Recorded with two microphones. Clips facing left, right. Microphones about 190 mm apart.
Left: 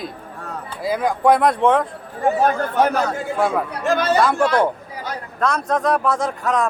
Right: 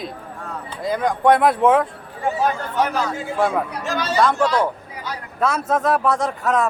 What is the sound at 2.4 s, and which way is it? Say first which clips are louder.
Speech: left 2 dB; 55° left (ahead or behind).